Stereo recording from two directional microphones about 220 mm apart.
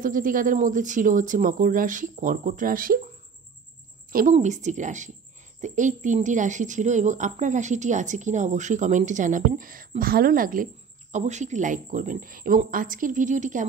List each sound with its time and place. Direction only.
0.0 s a woman's voice: 40° right (ahead or behind)
4.1 s a woman's voice: 35° right (ahead or behind)